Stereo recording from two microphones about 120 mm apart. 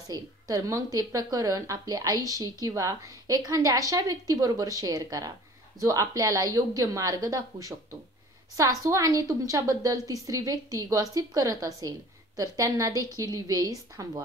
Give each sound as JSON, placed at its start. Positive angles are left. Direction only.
{"t": 0.1, "sound": "a woman's voice", "side_deg": -30}